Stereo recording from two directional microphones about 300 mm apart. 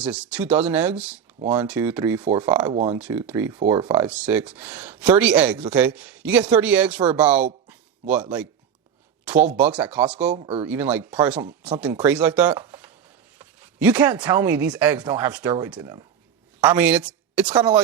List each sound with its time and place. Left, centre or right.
0.0 s speech: centre
2.2 s speech: centre
2.5 s speech: centre
3.8 s speech: centre
10.3 s speech: centre
10.7 s speech: centre